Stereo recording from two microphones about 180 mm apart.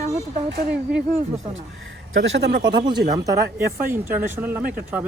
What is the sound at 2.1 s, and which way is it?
Speech, 85° right.